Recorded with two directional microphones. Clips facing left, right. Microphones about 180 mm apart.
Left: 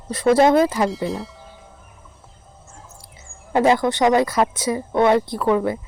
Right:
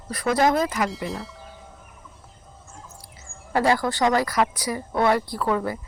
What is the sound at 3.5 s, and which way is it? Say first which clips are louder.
Speech: left 4 dB; 20° left (ahead or behind).